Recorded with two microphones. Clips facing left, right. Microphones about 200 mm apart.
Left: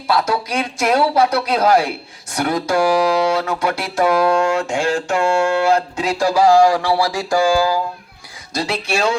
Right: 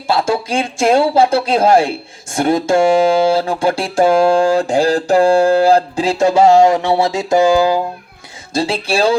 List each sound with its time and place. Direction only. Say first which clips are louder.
0.1 s speech: right 3 dB; 25° right (ahead or behind)